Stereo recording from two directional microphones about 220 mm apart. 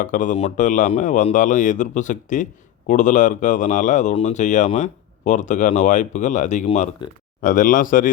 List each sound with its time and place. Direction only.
0.0 s speech: 35° left (ahead or behind)